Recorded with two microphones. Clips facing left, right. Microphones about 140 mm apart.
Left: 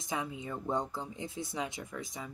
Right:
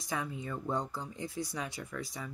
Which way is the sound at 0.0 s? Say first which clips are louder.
Even; 20° left (ahead or behind).